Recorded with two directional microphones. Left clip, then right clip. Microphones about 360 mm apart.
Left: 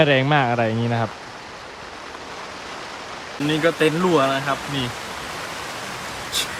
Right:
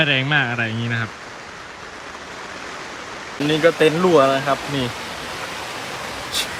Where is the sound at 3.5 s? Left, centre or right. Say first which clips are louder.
Right 3 dB; centre.